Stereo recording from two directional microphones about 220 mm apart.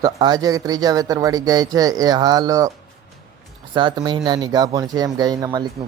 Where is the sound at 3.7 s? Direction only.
20° right (ahead or behind).